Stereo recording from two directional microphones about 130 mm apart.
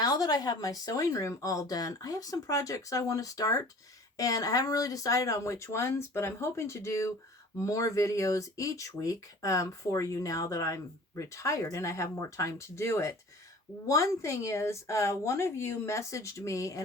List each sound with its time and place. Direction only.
0.0 s speech: 30° left (ahead or behind)